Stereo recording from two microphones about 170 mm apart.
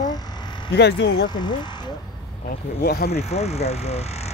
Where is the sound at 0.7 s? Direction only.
80° left.